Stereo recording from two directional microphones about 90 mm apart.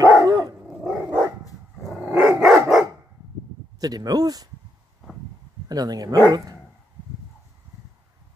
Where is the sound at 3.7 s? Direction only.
45° right (ahead or behind).